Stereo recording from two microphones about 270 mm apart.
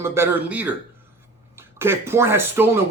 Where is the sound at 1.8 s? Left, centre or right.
Centre.